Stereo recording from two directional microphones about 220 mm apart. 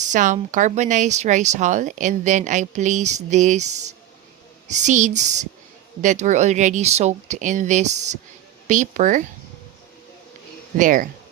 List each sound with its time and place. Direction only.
0.0 s speech: 35° right (ahead or behind)
10.8 s speech: 35° right (ahead or behind)